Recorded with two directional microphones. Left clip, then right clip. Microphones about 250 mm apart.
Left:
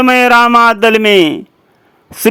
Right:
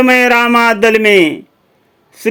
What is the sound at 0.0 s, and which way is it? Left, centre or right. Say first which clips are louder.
Speech: left 2 dB; centre.